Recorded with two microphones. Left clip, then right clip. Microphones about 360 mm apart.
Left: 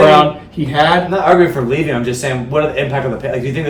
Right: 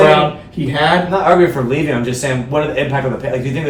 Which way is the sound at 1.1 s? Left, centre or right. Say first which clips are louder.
Even; centre.